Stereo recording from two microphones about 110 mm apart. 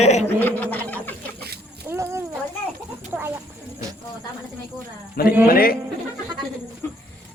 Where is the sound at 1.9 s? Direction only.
25° right (ahead or behind).